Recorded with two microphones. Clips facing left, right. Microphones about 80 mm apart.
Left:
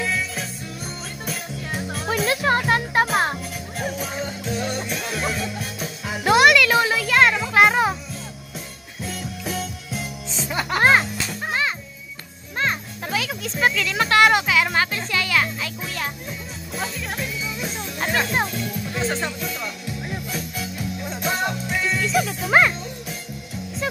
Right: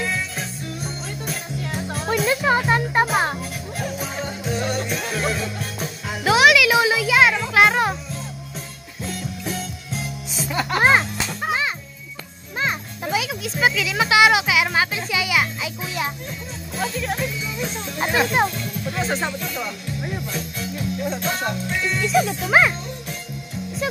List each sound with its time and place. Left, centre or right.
0.0 s music: centre
10.7 s music: centre
12.5 s music: centre
16.7 s music: centre
18.9 s speech: centre
20.2 s music: centre